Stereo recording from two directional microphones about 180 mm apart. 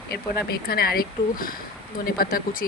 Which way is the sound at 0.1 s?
55° left (ahead or behind).